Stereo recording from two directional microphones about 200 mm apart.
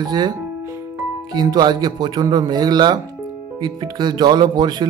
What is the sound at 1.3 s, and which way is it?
Music, 20° right (ahead or behind).